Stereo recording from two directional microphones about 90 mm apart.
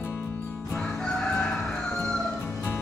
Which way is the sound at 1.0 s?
5° left (ahead or behind).